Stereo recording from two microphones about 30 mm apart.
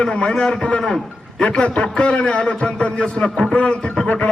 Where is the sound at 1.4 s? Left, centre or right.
Left.